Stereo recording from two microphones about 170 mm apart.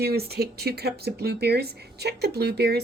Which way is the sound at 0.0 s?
65° right (ahead or behind).